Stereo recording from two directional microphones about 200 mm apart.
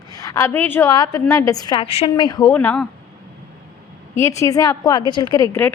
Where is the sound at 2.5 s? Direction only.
10° left (ahead or behind).